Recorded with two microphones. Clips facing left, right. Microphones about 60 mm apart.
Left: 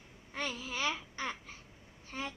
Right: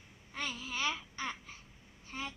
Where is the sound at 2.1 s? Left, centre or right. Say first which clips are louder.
Left 1 dB; left.